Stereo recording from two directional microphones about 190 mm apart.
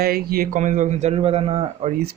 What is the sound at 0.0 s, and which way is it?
A man's voice, 50° right (ahead or behind).